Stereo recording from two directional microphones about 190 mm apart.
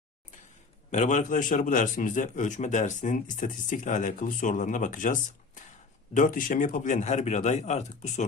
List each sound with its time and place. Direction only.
0.9 s a man's voice: 40° left (ahead or behind)
6.1 s a man's voice: 45° left (ahead or behind)